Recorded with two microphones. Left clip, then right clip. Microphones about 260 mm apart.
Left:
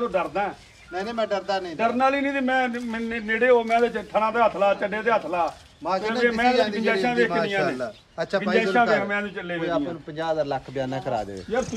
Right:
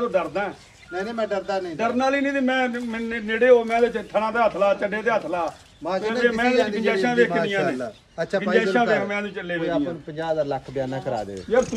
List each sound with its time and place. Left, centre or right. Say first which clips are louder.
0.0 s a man's voice: right 1 dB; left
1.8 s a man's voice: left 1 dB; left
6.8 s speech: right 2 dB; left
7.8 s a man's voice: right 1 dB; centre